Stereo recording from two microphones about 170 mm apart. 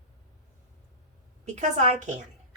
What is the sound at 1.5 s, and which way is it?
Speech, 45° right (ahead or behind).